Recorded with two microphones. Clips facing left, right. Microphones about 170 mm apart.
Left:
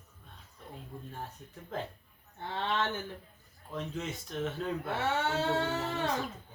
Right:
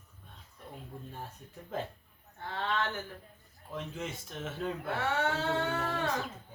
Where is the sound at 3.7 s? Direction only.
5° right (ahead or behind).